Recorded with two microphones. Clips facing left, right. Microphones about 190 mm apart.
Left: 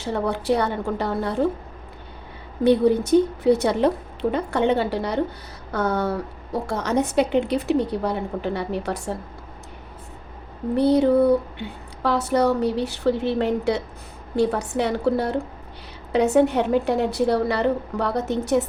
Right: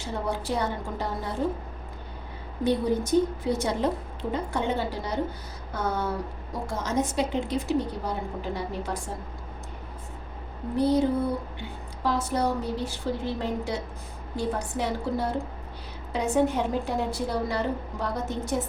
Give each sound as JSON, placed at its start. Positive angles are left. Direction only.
{"t": 0.0, "sound": "a woman's voice", "side_deg": 65}
{"t": 2.6, "sound": "a woman's voice", "side_deg": 65}
{"t": 10.8, "sound": "a woman's voice", "side_deg": 70}